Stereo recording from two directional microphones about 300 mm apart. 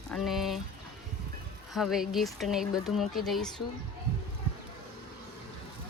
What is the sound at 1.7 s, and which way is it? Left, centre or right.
Speech, centre.